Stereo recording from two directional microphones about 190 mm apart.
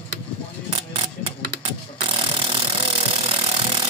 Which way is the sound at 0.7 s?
30° right (ahead or behind).